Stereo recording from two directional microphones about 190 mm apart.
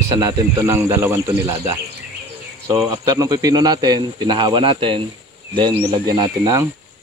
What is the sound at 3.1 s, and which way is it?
Speech, 20° right (ahead or behind).